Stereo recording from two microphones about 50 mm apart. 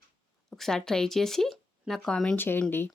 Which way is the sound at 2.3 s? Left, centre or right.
Left.